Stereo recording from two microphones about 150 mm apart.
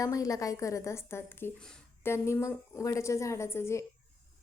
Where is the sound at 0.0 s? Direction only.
25° left (ahead or behind).